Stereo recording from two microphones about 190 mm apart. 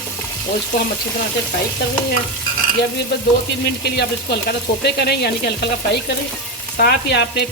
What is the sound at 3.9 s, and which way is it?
Frying, 60° left (ahead or behind).